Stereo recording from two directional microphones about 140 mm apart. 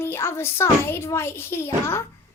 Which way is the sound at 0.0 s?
20° left (ahead or behind).